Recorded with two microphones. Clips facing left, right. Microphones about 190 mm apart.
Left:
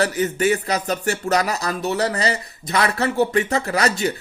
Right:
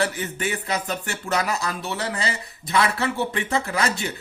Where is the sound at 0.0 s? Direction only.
40° left (ahead or behind).